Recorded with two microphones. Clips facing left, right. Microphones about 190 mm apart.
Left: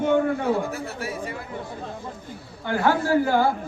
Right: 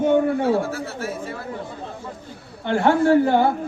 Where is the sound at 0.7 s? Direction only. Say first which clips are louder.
Right 2 dB; 15° left (ahead or behind).